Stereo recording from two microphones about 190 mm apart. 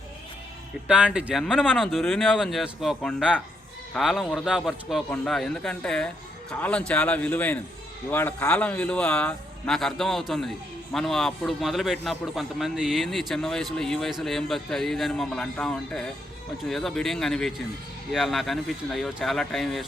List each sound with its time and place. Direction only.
0.9 s a man's voice: 5° right (ahead or behind)